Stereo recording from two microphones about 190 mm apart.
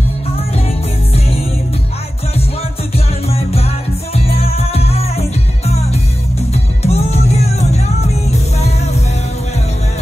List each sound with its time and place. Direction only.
3.3 s music: 30° left (ahead or behind)
6.5 s music: 35° left (ahead or behind)